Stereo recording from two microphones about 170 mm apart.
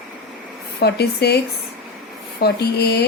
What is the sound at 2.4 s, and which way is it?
Speech, 70° left (ahead or behind).